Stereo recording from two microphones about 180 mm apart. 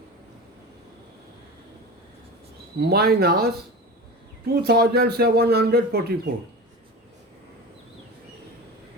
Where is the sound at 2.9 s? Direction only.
60° right (ahead or behind).